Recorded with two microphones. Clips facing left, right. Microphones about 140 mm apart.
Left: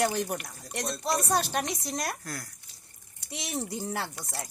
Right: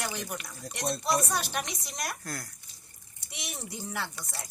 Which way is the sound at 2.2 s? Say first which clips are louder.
Even; 5° left (ahead or behind).